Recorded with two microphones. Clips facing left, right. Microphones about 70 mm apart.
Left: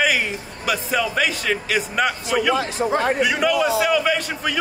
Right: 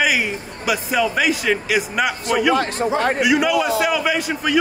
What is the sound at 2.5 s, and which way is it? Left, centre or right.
Speech, right.